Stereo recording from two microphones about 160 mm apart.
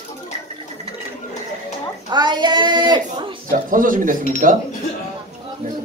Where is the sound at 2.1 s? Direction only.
30° right (ahead or behind).